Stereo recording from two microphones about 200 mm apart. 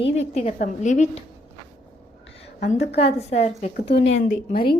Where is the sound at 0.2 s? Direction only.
35° left (ahead or behind).